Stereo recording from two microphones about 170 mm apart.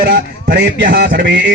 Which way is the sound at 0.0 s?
75° right (ahead or behind).